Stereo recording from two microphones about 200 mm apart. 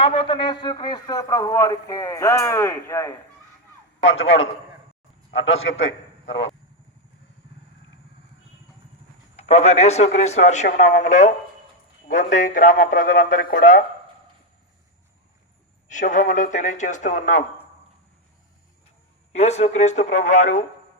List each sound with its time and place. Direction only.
0.0 s a man's voice: 25° left (ahead or behind)
5.4 s a man's voice: 70° left (ahead or behind)
9.3 s a man's voice: 35° left (ahead or behind)
15.9 s a man's voice: 40° left (ahead or behind)
19.3 s a man's voice: 35° left (ahead or behind)